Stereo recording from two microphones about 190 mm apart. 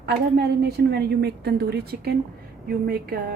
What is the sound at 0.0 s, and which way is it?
A woman's voice, 60° right (ahead or behind).